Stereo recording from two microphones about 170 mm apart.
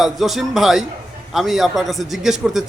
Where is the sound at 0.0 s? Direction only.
Centre (ahead or behind).